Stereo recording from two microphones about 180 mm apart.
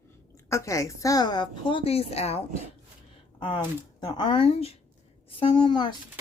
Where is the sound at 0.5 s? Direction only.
15° left (ahead or behind); by 2.4 s 35° left (ahead or behind).